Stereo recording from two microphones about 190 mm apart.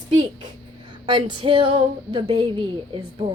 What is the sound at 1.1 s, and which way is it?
A child's voice, 25° right (ahead or behind).